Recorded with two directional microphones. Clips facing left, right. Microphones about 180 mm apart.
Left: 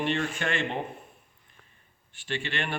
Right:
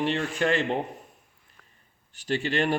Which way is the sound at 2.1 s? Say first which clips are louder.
Right 6 dB; 40° right (ahead or behind).